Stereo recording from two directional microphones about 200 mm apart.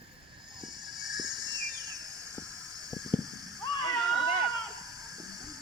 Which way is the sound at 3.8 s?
Centre (ahead or behind).